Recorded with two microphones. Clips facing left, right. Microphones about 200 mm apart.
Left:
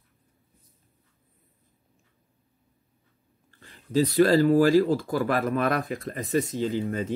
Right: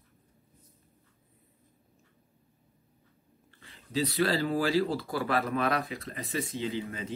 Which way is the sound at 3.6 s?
50° left (ahead or behind).